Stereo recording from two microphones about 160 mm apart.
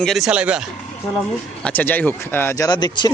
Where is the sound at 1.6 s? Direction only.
10° left (ahead or behind).